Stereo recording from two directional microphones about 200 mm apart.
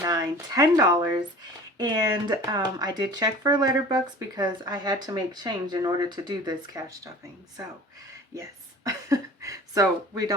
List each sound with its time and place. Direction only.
0.0 s speech: 20° right (ahead or behind)
8.4 s speech: 15° right (ahead or behind)